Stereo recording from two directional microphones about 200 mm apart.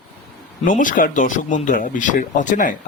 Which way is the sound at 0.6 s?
40° left (ahead or behind).